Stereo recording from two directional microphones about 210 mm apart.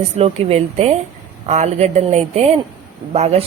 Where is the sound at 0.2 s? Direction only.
30° right (ahead or behind).